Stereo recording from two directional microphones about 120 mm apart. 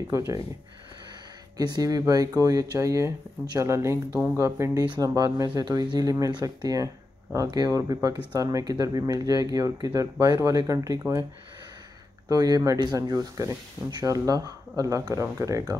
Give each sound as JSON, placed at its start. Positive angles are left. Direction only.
{"t": 0.1, "sound": "speech", "side_deg": -25}
{"t": 1.6, "sound": "speech", "side_deg": -30}
{"t": 12.3, "sound": "speech", "side_deg": -35}